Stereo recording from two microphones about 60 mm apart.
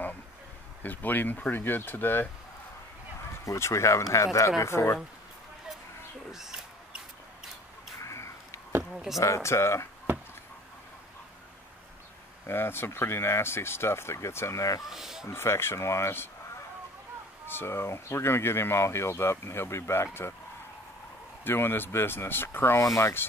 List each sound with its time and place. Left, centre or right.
0.8 s speech: left
3.4 s speech: left
6.3 s a sound: centre
8.0 s a sound: left
8.9 s speech: centre
9.2 s speech: left
12.4 s speech: left
14.9 s speech: centre
15.2 s speech: left
17.5 s speech: left
21.5 s speech: left
22.8 s speech: left